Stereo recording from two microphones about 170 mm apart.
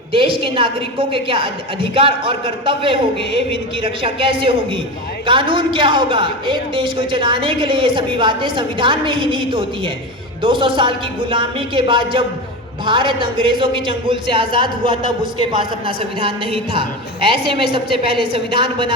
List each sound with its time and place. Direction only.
0.1 s a woman's voice: 30° right (ahead or behind)
4.0 s a woman's voice: 30° right (ahead or behind)